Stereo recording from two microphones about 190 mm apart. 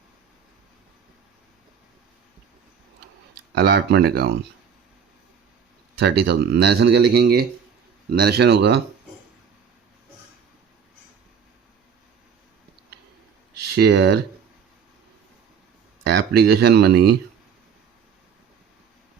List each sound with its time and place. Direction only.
3.5 s speech: 60° right (ahead or behind)
6.0 s speech: 60° right (ahead or behind)
13.7 s speech: 60° right (ahead or behind)
16.0 s speech: 60° right (ahead or behind)